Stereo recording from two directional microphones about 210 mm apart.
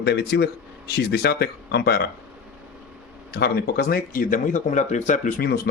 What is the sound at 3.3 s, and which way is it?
Speech, 50° left (ahead or behind).